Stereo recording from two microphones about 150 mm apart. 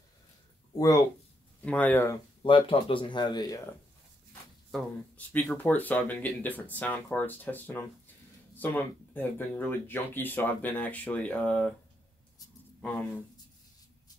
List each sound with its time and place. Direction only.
0.7 s speech: 25° left (ahead or behind)
1.6 s speech: 10° left (ahead or behind)
2.4 s speech: 35° left (ahead or behind)
4.6 s speech: 5° left (ahead or behind)